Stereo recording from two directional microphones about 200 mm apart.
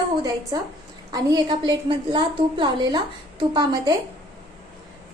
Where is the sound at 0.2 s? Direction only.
20° right (ahead or behind).